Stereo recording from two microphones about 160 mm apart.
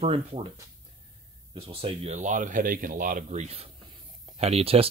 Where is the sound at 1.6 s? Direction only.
35° right (ahead or behind).